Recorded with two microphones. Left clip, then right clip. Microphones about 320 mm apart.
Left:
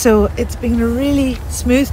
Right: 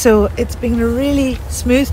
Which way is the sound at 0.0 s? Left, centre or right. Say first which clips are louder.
Right 1 dB; centre.